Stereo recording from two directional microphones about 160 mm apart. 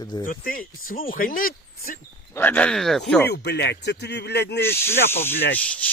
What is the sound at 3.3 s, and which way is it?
Speech, 90° left.